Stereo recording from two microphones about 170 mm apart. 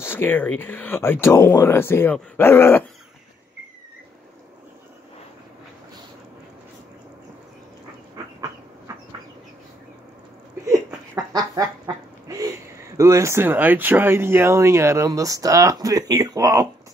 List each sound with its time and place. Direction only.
0.0 s speech: 15° left (ahead or behind)
8.2 s a sound: 20° right (ahead or behind)
11.3 s speech: 20° right (ahead or behind)